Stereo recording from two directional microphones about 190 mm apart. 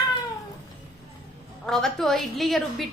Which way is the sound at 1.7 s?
Centre (ahead or behind).